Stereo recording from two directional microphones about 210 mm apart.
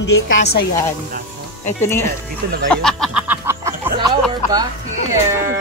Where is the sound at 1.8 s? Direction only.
10° left (ahead or behind).